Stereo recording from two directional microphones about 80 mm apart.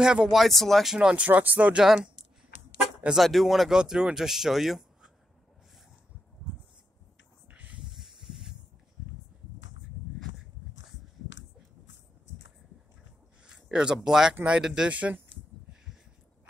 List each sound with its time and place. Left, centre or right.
0.0 s speech: centre
0.9 s speech: centre
3.2 s speech: centre
7.4 s a sound: centre
7.9 s hiss: centre
13.7 s speech: centre